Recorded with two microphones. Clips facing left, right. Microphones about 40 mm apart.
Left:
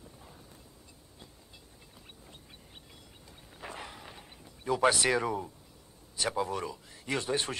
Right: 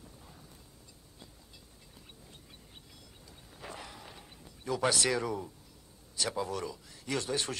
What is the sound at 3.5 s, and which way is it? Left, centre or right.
Artillery fire, left.